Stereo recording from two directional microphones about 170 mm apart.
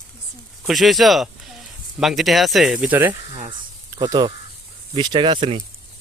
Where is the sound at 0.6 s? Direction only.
Centre (ahead or behind).